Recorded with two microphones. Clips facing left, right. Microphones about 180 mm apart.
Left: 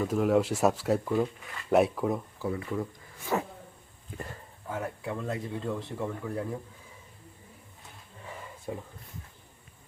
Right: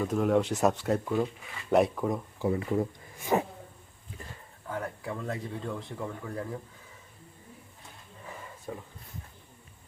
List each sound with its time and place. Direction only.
0.0 s speech: 5° left (ahead or behind)
2.4 s speech: 30° right (ahead or behind)
3.3 s a sound: 20° right (ahead or behind)
4.7 s speech: 5° left (ahead or behind)
8.7 s speech: 15° left (ahead or behind)